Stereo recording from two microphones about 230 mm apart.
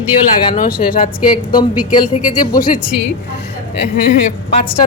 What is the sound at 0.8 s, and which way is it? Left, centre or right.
A woman's voice, left.